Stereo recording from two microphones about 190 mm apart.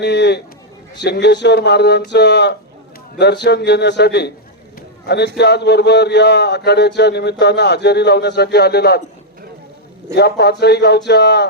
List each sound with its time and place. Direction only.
0.0 s a man's voice: 65° left (ahead or behind)
10.2 s a man's voice: 60° left (ahead or behind)